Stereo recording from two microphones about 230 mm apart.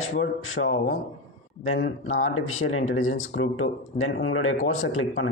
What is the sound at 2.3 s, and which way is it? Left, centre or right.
Speech, left.